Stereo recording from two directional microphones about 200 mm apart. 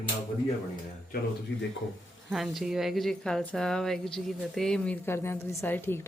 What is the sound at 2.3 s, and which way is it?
Speech, centre (ahead or behind).